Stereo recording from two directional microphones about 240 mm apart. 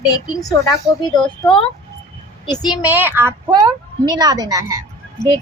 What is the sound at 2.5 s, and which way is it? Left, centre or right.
Speech, centre.